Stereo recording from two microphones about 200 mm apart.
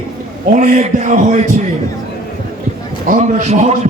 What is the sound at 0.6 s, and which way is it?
Speech, 40° right (ahead or behind).